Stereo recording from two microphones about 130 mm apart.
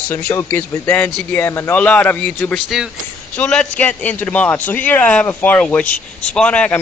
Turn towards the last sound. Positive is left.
turn(degrees=10)  # may be behind; listen again after turning